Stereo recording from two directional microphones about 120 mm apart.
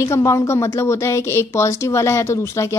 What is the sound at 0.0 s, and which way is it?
A woman's voice, 25° left (ahead or behind).